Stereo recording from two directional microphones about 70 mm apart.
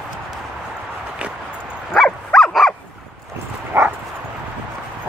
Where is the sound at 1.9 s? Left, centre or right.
Centre.